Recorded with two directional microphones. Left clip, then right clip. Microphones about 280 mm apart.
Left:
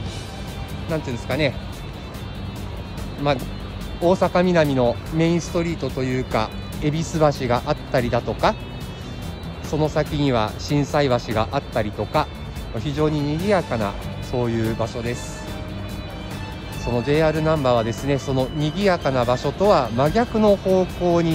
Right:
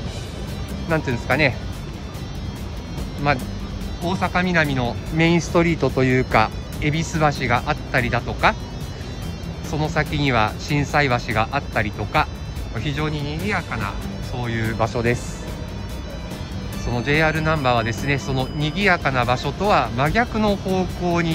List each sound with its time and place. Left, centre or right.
0.8 s speech: centre
4.1 s speech: centre
9.7 s speech: centre
16.9 s speech: centre